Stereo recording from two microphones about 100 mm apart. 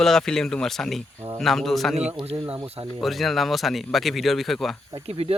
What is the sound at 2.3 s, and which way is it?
Speech, 70° right (ahead or behind).